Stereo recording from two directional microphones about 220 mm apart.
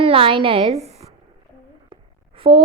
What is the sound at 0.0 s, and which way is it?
A woman's voice, 25° right (ahead or behind).